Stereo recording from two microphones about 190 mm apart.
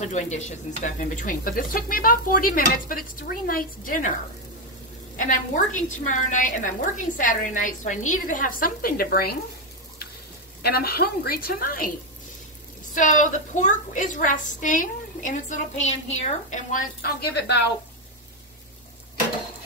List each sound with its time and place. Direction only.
0.0 s a woman's voice: 40° left (ahead or behind)
5.1 s a woman's voice: 40° left (ahead or behind)
10.6 s a woman's voice: 55° left (ahead or behind)
12.9 s a woman's voice: 40° left (ahead or behind)